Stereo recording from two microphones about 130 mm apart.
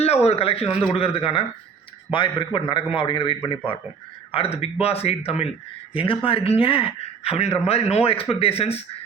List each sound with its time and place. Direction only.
0.0 s a man's voice: 55° left (ahead or behind)